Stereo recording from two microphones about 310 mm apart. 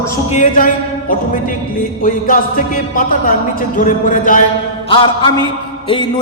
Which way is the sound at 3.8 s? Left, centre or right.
Left.